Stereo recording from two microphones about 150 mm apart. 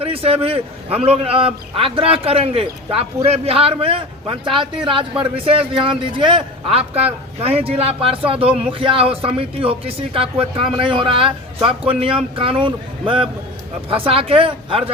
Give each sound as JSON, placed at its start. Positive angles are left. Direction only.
{"t": 0.0, "sound": "a man's voice", "side_deg": -40}